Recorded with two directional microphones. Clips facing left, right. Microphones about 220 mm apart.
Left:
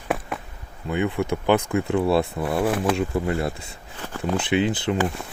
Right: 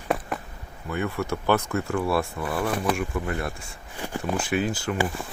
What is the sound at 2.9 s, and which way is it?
Speech, 25° left (ahead or behind).